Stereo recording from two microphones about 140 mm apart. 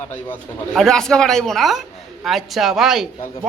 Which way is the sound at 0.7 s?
5° left (ahead or behind).